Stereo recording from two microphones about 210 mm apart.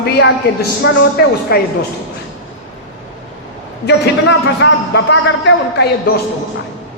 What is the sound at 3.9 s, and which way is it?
A man's voice, 55° left (ahead or behind).